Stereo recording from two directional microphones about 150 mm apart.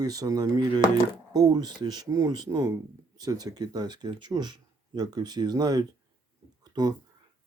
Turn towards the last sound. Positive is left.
turn(degrees=-25)  # may be behind; listen again after turning